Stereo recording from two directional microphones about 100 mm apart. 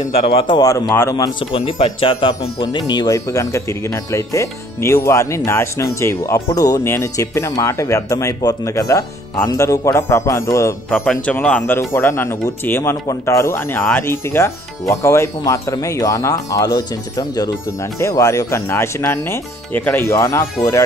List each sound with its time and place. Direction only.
0.5 s speech: 35° left (ahead or behind)
1.5 s speech: 65° left (ahead or behind)
2.9 s speech: 45° left (ahead or behind)
3.3 s speech: 30° left (ahead or behind)
6.8 s speech: 25° left (ahead or behind)
10.9 s a man's voice: 5° left (ahead or behind)
11.3 s speech: 15° left (ahead or behind); by 20.4 s 30° left (ahead or behind)